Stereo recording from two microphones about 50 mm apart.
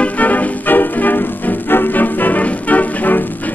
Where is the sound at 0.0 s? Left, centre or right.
Left.